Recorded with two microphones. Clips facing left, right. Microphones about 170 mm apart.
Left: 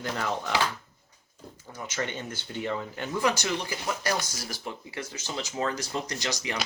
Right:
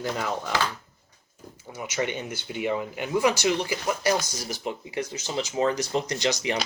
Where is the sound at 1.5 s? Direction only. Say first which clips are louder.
Right 4 dB; 10° right (ahead or behind).